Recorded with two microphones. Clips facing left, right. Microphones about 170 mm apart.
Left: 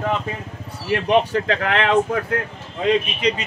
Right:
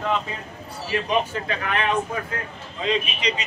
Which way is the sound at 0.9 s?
70° left (ahead or behind).